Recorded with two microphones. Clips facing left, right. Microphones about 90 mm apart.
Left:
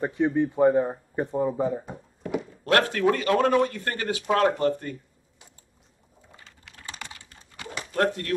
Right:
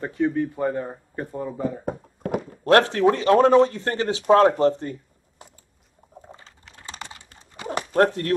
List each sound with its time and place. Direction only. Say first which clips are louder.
0.0 s speech: even; 15° left (ahead or behind)
1.9 s a sound: right 5 dB; 50° right (ahead or behind)
2.6 s speech: right 5 dB; 30° right (ahead or behind)
6.3 s typing: right 2 dB; 30° right (ahead or behind)
7.9 s speech: right 5 dB; 40° right (ahead or behind)